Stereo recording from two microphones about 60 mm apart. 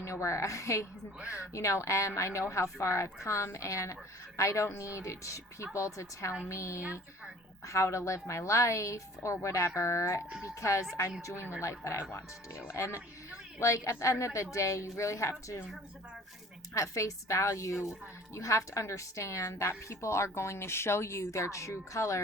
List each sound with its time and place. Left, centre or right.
0.0 s a woman's voice: left
16.7 s a woman's voice: left